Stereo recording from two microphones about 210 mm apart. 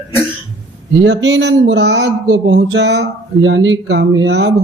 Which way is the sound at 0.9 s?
65° right (ahead or behind).